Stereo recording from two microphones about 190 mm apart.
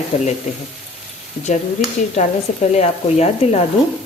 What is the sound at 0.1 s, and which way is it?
Speech, 30° left (ahead or behind).